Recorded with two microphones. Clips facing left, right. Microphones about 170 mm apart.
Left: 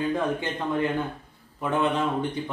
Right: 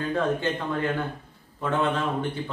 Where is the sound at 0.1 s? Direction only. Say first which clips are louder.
Right 2 dB; 15° left (ahead or behind).